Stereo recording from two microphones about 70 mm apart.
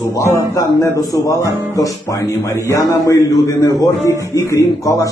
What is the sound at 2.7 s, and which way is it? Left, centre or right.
A man's voice, left.